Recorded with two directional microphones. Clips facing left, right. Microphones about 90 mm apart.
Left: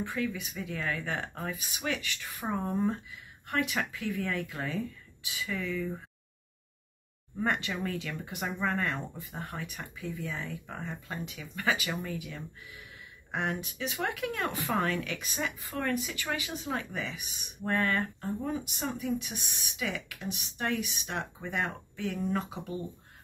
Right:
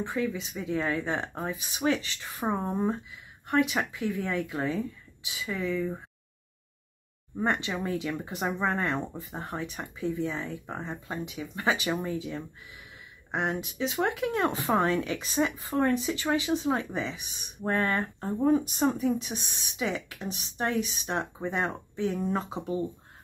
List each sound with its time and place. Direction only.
0.0 s speech: 25° right (ahead or behind)
7.3 s speech: 20° right (ahead or behind)